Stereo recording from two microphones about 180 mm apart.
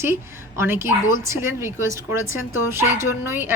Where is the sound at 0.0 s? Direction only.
15° right (ahead or behind).